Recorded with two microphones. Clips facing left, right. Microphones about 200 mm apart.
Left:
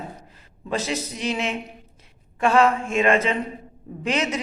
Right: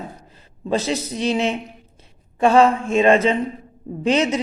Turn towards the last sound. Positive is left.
turn(degrees=-30)  # may be behind; listen again after turning